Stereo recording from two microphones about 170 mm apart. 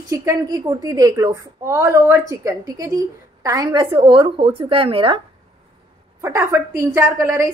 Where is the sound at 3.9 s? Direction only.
30° right (ahead or behind).